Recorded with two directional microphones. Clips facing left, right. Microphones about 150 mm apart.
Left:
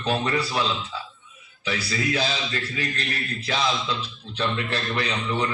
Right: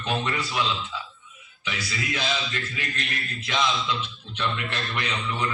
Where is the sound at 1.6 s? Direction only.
35° left (ahead or behind).